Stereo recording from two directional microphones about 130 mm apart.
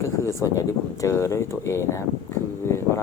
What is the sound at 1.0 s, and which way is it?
Speech, 20° left (ahead or behind).